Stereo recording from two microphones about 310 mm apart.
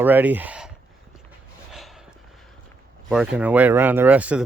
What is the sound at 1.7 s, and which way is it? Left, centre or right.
Snort, centre.